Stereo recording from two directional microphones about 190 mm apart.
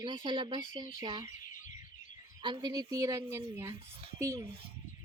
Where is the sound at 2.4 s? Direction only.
25° right (ahead or behind).